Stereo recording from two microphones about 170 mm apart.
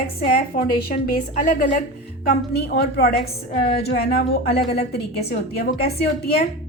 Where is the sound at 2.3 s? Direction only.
70° left (ahead or behind).